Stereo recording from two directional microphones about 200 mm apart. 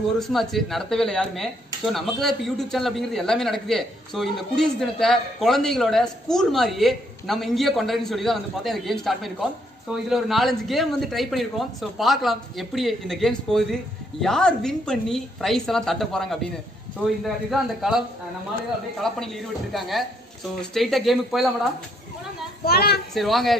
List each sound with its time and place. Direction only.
0.2 s speech: centre (ahead or behind)
22.7 s a woman's voice: 50° left (ahead or behind)
23.1 s speech: centre (ahead or behind)